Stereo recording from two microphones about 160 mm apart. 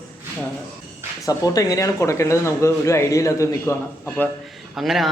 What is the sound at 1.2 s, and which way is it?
Speech, 20° left (ahead or behind).